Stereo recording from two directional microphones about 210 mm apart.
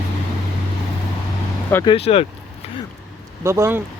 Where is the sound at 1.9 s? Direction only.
25° left (ahead or behind).